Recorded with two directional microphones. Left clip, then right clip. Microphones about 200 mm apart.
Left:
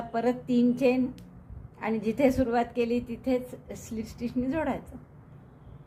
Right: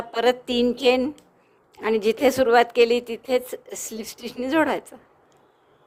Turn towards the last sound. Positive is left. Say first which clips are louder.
# right 8 dB
turn(degrees=-45)  # may be behind; listen again after turning